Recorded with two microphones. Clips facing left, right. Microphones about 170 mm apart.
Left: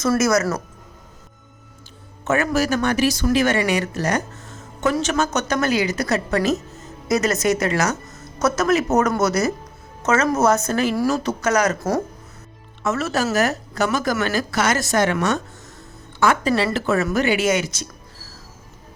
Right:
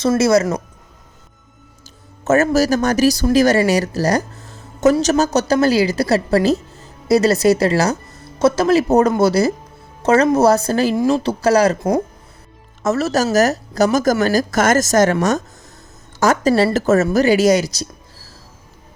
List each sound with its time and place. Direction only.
0.0 s a woman's voice: 30° right (ahead or behind)
2.2 s speech: 40° right (ahead or behind)
12.8 s a woman's voice: 40° right (ahead or behind)